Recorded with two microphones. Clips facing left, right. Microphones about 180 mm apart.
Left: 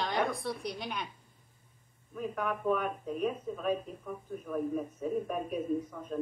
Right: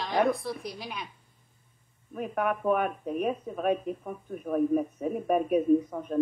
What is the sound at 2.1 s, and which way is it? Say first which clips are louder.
Speech: right 5 dB; 70° right (ahead or behind).